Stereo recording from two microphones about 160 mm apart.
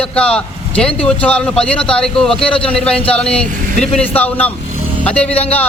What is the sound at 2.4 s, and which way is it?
Speech, 35° left (ahead or behind).